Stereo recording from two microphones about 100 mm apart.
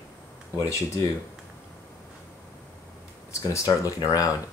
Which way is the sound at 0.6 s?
30° left (ahead or behind).